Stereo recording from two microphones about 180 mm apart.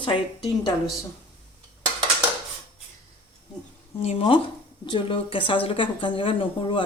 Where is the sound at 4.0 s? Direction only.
35° left (ahead or behind).